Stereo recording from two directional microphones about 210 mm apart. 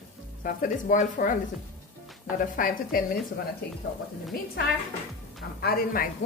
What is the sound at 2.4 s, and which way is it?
Speech, 40° left (ahead or behind).